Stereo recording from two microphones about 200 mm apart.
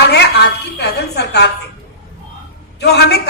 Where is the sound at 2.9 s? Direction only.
55° left (ahead or behind).